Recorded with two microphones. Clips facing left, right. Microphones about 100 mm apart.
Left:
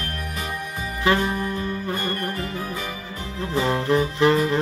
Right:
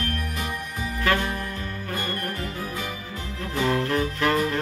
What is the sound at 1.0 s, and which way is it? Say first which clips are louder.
Music: left 4 dB; 20° left (ahead or behind).